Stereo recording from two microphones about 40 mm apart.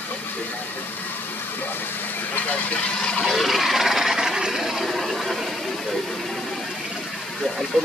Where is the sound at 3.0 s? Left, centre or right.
Left.